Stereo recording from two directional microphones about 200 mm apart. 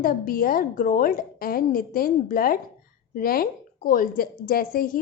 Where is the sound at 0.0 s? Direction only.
45° left (ahead or behind).